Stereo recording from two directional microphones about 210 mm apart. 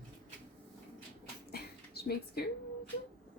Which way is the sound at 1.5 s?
50° left (ahead or behind).